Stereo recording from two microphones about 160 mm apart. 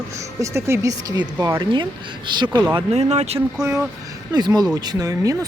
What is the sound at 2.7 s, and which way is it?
Speech, 40° right (ahead or behind).